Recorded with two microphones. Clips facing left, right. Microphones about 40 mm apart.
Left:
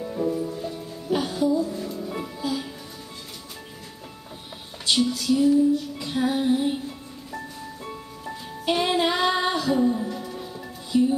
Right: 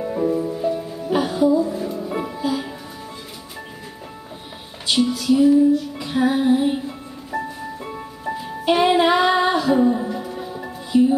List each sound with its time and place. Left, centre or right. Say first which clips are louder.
0.0 s music: right 5 dB; right
4.8 s music: right 4 dB; centre